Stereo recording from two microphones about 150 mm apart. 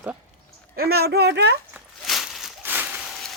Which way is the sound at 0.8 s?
90° right.